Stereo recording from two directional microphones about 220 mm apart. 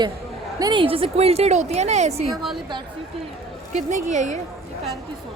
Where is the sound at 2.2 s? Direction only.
Centre (ahead or behind).